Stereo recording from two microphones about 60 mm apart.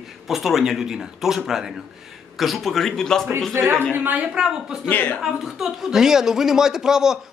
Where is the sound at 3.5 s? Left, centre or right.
Right.